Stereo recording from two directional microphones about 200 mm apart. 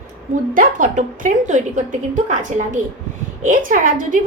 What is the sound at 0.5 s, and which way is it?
A woman's voice, 40° right (ahead or behind).